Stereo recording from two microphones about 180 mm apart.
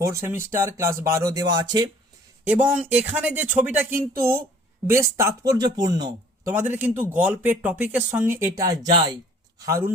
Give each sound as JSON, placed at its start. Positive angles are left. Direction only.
{"t": 0.0, "sound": "speech", "side_deg": -15}
{"t": 2.6, "sound": "speech", "side_deg": -10}